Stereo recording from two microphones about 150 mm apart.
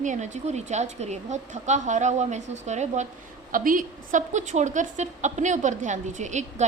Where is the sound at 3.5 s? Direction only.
65° right (ahead or behind).